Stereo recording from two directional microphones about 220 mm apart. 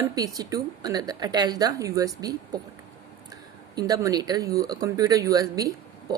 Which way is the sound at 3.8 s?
15° right (ahead or behind).